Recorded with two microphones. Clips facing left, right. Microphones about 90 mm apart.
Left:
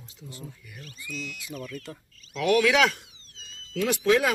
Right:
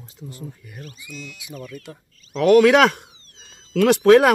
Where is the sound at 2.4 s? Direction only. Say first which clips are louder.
Right 8 dB; 40° right (ahead or behind).